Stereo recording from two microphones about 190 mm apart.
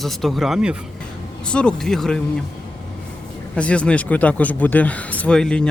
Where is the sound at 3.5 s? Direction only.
5° left (ahead or behind).